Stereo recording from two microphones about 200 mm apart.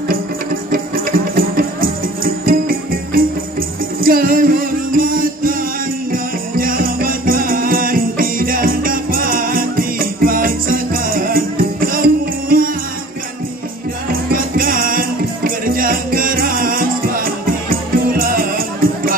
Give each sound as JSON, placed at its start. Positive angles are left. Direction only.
{"t": 0.7, "sound": "music", "side_deg": -45}
{"t": 14.3, "sound": "music", "side_deg": -45}